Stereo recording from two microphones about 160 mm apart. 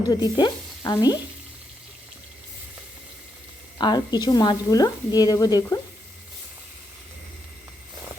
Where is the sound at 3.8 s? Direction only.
25° left (ahead or behind).